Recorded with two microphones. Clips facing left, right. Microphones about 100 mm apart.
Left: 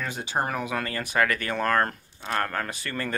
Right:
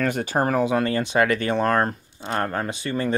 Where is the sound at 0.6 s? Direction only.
30° right (ahead or behind).